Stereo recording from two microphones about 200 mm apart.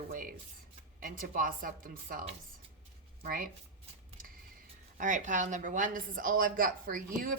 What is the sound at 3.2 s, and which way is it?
Speech, 45° right (ahead or behind).